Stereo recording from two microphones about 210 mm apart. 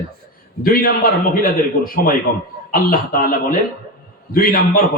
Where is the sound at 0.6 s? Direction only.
45° left (ahead or behind).